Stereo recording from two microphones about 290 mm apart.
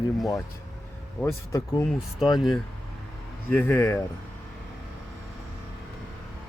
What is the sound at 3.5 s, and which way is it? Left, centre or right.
Speech, centre.